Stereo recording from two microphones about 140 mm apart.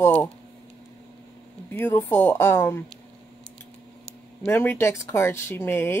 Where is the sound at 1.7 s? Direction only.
15° left (ahead or behind).